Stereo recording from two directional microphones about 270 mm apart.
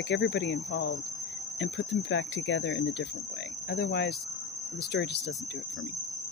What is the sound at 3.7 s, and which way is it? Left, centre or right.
Cricket, left.